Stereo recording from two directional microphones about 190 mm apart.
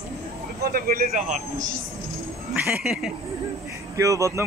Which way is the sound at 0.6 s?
55° right (ahead or behind).